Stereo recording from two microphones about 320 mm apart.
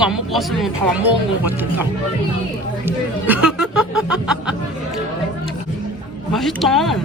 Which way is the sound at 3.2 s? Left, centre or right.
Centre.